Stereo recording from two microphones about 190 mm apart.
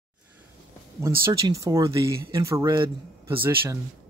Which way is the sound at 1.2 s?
15° right (ahead or behind).